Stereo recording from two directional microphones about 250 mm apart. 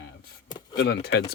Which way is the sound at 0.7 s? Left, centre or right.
Left.